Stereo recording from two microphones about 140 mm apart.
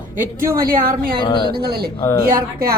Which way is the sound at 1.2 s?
35° left (ahead or behind).